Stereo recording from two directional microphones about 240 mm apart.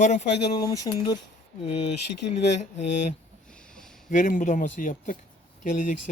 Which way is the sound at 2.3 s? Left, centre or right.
Left.